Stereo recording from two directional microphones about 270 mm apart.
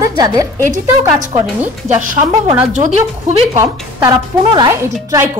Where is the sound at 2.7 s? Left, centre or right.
Right.